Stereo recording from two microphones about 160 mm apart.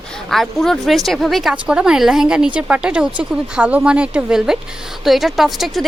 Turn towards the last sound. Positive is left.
turn(degrees=0)  # may be behind; listen again after turning